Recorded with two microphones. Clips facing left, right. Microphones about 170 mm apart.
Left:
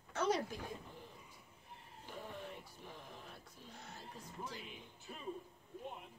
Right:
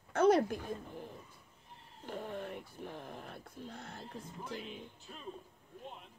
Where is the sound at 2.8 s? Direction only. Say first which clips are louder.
Right 8 dB; 60° right (ahead or behind).